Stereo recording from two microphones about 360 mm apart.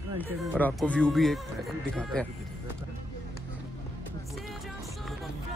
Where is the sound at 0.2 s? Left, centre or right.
Centre.